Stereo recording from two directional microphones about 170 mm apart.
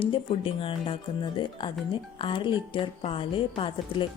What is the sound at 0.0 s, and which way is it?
A woman's voice, 30° left (ahead or behind).